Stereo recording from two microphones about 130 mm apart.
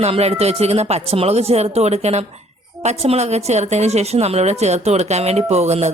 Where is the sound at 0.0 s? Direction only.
55° right (ahead or behind).